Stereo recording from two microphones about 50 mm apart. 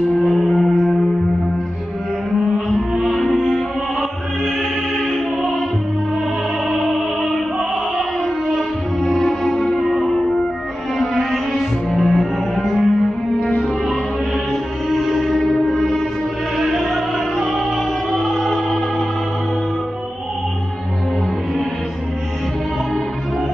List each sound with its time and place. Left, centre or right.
0.3 s singing bowl: centre
2.7 s music: centre
4.9 s music: centre
6.7 s music: centre
8.5 s music: centre